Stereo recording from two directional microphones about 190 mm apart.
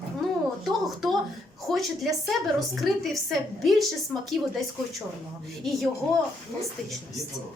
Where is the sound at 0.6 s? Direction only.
Centre (ahead or behind).